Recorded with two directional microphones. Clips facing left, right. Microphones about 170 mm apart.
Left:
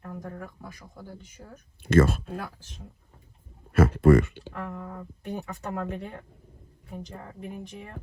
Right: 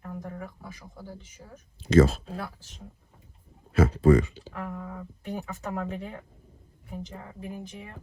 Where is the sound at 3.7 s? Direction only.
55° left (ahead or behind).